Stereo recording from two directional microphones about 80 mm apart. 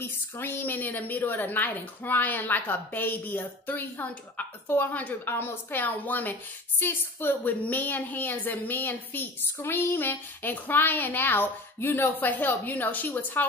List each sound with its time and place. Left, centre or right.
0.0 s a woman's voice: left